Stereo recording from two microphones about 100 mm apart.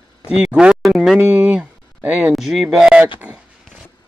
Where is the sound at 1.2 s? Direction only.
15° right (ahead or behind).